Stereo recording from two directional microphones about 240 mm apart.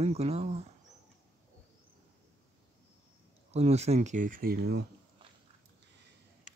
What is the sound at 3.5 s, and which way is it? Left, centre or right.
Speech, right.